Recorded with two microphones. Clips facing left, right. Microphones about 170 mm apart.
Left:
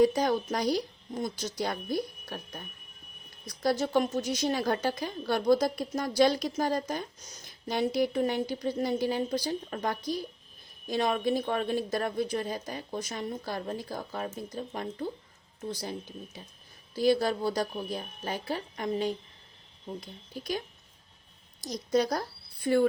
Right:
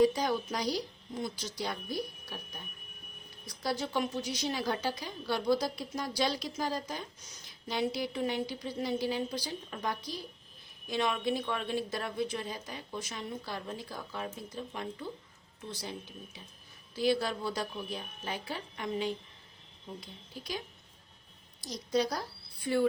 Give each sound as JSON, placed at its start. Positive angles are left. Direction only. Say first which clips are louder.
{"t": 0.0, "sound": "a woman's voice", "louder": "left 3 dB", "side_deg": 50}
{"t": 21.6, "sound": "a woman's voice", "louder": "left 4 dB", "side_deg": 45}